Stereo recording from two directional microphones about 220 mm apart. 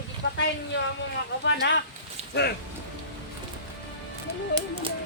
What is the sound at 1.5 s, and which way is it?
Speech, 55° left (ahead or behind).